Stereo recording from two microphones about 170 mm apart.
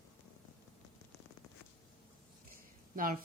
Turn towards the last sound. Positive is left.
turn(degrees=-55)  # may be behind; listen again after turning